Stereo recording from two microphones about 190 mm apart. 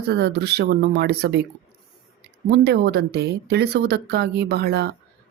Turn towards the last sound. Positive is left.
turn(degrees=-55)  # may be behind; listen again after turning